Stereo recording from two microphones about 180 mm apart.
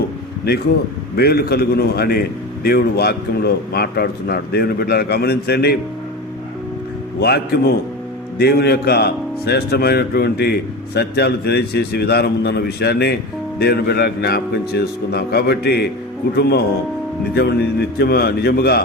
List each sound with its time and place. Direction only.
1.1 s speech: 60° left (ahead or behind)
7.2 s speech: 60° left (ahead or behind)